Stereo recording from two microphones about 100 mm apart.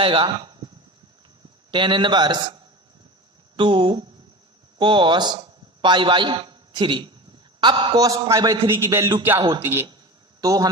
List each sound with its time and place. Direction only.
0.0 s speech: 55° right (ahead or behind)
1.7 s a man's voice: 55° right (ahead or behind)
8.6 s music: 30° right (ahead or behind)
10.4 s a man's voice: 35° right (ahead or behind)